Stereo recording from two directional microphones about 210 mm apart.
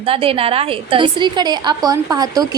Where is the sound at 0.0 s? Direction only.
25° right (ahead or behind).